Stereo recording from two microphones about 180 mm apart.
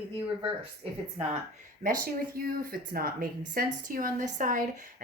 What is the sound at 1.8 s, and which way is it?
Speech, 55° right (ahead or behind).